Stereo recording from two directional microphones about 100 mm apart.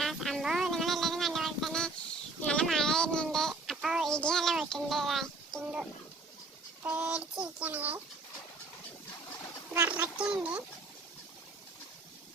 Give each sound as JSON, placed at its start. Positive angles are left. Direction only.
{"t": 0.0, "sound": "vehicle", "side_deg": 0}
{"t": 2.4, "sound": "a sound", "side_deg": 10}
{"t": 6.8, "sound": "speech", "side_deg": -15}
{"t": 9.7, "sound": "speech", "side_deg": -20}